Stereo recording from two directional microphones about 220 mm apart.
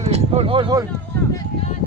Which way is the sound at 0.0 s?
30° right (ahead or behind).